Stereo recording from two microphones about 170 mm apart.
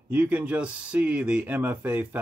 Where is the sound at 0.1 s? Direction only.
10° right (ahead or behind).